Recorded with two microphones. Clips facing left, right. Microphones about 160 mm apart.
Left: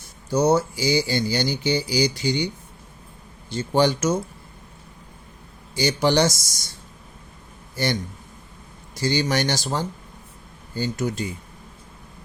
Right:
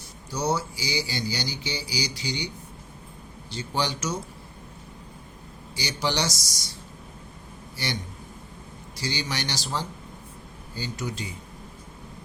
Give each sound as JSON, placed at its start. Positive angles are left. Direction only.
{"t": 0.3, "sound": "speech", "side_deg": 50}
{"t": 3.5, "sound": "speech", "side_deg": 50}
{"t": 5.7, "sound": "speech", "side_deg": 50}
{"t": 9.0, "sound": "speech", "side_deg": 50}